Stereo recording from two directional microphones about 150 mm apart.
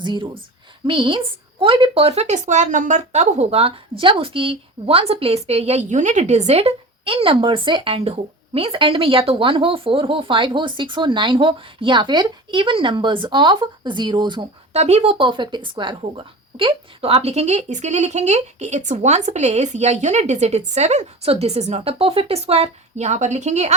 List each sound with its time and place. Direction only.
0.0 s speech: 30° right (ahead or behind)
14.7 s speech: 45° right (ahead or behind)